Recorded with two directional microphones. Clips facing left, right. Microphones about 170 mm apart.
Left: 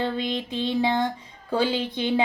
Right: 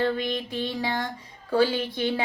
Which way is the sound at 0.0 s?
20° left (ahead or behind).